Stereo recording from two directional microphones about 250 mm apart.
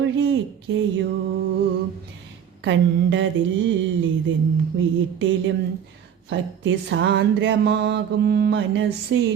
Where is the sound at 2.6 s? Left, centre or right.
Right.